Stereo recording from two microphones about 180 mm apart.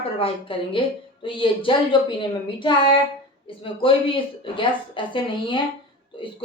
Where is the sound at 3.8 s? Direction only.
30° left (ahead or behind).